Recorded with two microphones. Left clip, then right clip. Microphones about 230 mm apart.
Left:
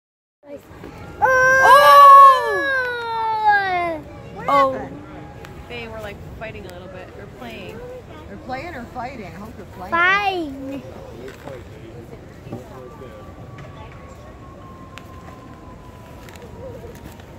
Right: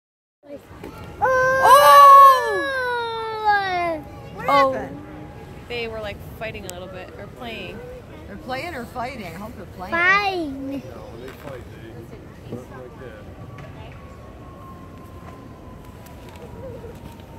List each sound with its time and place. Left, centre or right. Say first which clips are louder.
1.2 s a sound: left 4 dB; centre
1.6 s baby cry: left 1 dB; centre
2.6 s baby cry: left 2 dB; right
4.5 s speech: left 1 dB; centre
5.7 s speech: right 4 dB; right
8.5 s speech: right 1 dB; right
9.8 s a child's voice: left 1 dB; right